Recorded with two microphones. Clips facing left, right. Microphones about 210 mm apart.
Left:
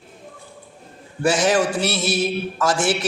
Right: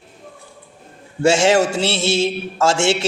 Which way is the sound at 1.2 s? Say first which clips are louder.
Right 4 dB; 25° right (ahead or behind).